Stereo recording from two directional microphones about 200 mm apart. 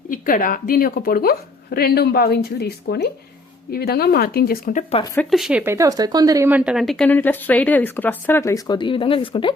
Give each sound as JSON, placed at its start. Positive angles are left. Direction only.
{"t": 0.1, "sound": "a woman's voice", "side_deg": 45}
{"t": 5.3, "sound": "speech", "side_deg": -5}